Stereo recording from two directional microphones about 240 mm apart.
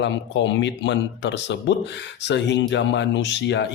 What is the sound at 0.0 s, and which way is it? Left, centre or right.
Speech, left.